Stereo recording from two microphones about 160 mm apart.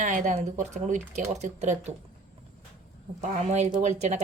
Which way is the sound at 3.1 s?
45° right (ahead or behind).